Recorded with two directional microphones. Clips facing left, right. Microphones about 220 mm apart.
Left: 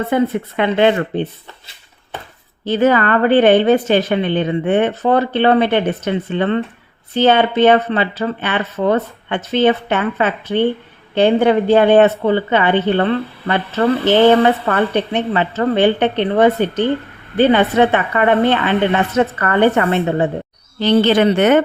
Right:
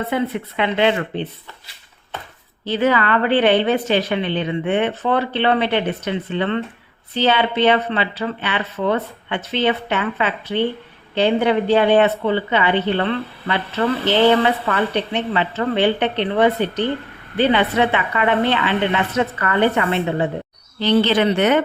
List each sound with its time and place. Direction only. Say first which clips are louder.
0.1 s a woman's voice: left 5 dB; 45° left (ahead or behind)
2.6 s a woman's voice: left 4 dB; 45° left (ahead or behind)